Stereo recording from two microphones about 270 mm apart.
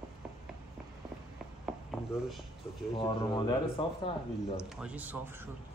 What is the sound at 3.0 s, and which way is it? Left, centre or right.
Speech, centre.